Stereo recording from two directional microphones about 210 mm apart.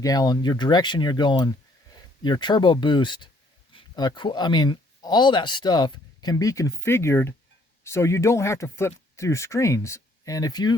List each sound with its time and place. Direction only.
0.0 s speech: 20° left (ahead or behind)